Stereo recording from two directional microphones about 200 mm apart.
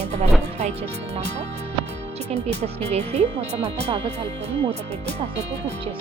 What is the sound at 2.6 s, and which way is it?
Speech, 35° right (ahead or behind).